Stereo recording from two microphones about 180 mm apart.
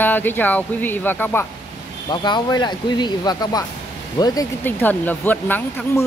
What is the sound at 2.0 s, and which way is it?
Speech, 25° left (ahead or behind).